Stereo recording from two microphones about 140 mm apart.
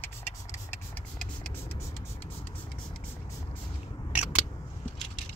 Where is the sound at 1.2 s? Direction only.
5° left (ahead or behind).